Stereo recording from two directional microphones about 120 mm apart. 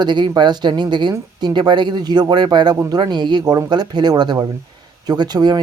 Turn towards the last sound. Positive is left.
turn(degrees=-35)  # may be behind; listen again after turning